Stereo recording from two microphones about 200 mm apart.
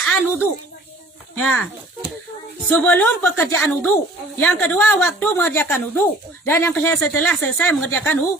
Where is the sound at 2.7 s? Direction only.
10° left (ahead or behind).